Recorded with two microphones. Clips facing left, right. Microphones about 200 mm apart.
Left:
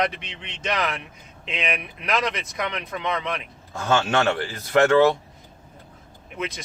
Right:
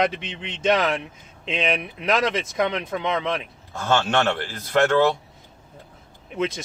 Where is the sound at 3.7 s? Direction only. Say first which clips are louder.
Even; centre (ahead or behind).